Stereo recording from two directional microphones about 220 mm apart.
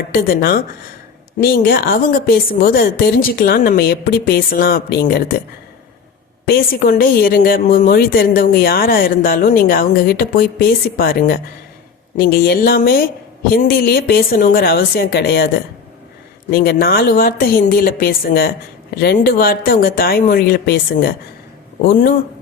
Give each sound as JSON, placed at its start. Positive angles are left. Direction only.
{"t": 0.1, "sound": "speech", "side_deg": 40}
{"t": 6.4, "sound": "a woman's voice", "side_deg": 45}